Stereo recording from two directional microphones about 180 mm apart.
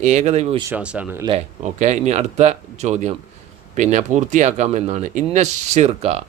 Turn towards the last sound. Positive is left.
turn(degrees=-35)  # may be behind; listen again after turning